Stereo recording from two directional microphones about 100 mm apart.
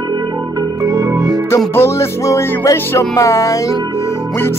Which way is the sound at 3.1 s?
30° left (ahead or behind).